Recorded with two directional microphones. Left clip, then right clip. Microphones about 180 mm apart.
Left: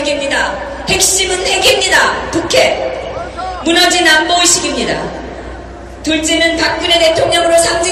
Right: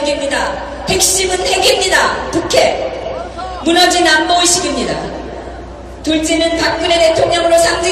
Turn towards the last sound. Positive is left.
turn(degrees=20)  # may be behind; listen again after turning